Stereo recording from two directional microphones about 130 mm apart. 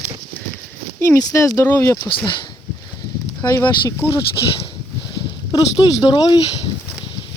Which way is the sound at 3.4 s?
20° left (ahead or behind).